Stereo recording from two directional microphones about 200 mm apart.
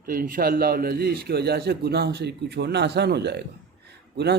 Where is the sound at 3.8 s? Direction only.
55° right (ahead or behind).